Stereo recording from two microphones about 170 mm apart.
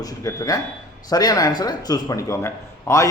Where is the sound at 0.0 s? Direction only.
20° left (ahead or behind).